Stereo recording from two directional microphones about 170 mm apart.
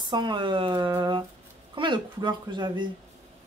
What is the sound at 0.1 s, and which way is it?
Speech, 25° right (ahead or behind).